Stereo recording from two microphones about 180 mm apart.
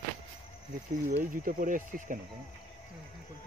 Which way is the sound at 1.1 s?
50° right (ahead or behind).